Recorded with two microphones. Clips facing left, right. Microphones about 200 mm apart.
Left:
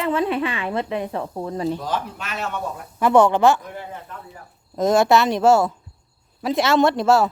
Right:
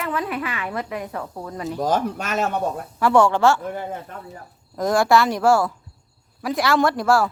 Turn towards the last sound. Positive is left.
turn(degrees=25)  # may be behind; listen again after turning